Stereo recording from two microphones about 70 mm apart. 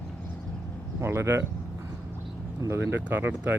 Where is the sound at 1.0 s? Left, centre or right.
Right.